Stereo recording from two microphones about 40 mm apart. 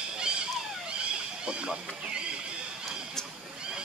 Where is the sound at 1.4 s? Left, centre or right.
Right.